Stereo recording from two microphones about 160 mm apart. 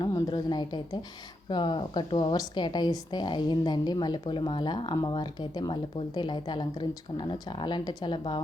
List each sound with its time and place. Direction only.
0.0 s a woman's voice: 25° left (ahead or behind)